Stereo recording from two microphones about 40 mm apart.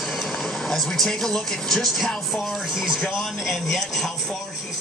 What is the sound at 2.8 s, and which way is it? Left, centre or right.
Speech, centre.